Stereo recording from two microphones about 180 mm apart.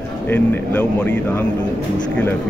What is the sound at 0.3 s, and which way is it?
Speech, 10° left (ahead or behind).